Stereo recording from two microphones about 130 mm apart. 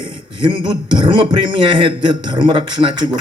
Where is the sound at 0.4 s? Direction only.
40° right (ahead or behind).